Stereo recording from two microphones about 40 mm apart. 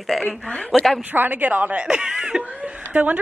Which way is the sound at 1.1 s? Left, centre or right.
Right.